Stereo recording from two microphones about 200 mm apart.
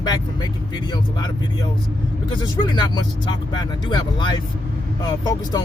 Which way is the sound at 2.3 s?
20° left (ahead or behind).